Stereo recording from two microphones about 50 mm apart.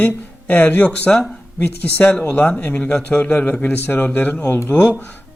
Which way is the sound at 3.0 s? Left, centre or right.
Left.